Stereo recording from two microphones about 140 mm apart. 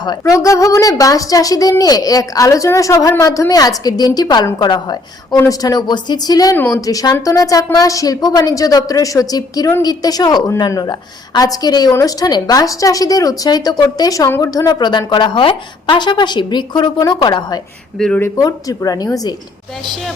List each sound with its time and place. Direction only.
0.0 s a woman's voice: 25° left (ahead or behind)
17.9 s speech: 5° left (ahead or behind)
18.2 s a woman's voice: 25° left (ahead or behind)